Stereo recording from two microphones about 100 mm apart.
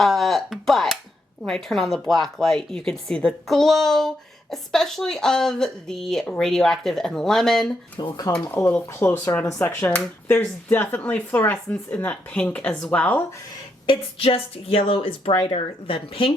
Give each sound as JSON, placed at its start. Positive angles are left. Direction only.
{"t": 0.0, "sound": "a sound", "side_deg": 0}
{"t": 1.5, "sound": "speech", "side_deg": 5}
{"t": 7.9, "sound": "speech", "side_deg": 45}
{"t": 8.7, "sound": "speech", "side_deg": 20}
{"t": 13.8, "sound": "speech", "side_deg": 60}